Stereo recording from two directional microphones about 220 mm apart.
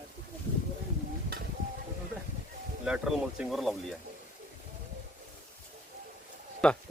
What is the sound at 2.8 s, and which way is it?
Speech, 5° right (ahead or behind).